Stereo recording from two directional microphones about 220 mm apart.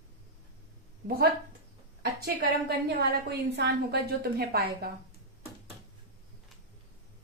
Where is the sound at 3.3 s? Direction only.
50° right (ahead or behind).